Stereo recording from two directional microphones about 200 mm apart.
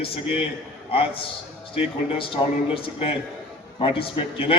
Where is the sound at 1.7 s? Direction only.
25° left (ahead or behind).